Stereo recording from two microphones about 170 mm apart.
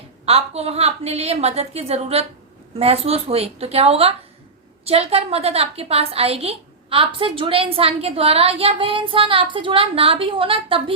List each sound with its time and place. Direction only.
0.3 s a woman's voice: 35° right (ahead or behind)